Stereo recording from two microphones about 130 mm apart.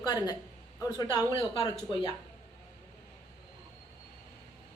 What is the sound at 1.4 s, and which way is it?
Speech, 35° left (ahead or behind).